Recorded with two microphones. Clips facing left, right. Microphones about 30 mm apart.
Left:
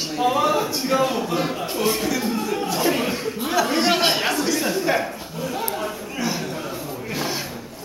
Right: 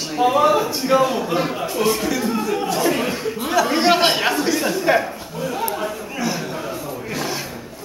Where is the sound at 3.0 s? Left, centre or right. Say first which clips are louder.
Right 2 dB; centre.